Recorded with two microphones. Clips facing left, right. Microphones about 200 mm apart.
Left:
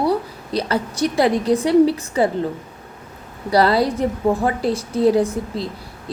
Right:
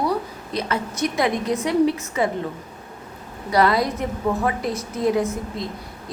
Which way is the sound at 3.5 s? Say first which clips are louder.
Left 3 dB; 30° left (ahead or behind).